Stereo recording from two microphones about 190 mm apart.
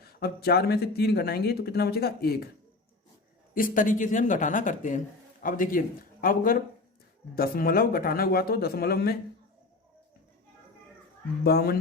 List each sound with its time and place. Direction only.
0.0 s speech: 55° left (ahead or behind)
3.5 s speech: 45° left (ahead or behind)
11.4 s speech: 55° left (ahead or behind)